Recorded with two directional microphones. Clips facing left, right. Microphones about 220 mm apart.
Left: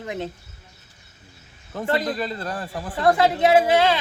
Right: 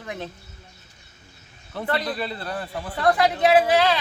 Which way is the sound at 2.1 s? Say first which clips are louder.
Left 2 dB; 45° left (ahead or behind).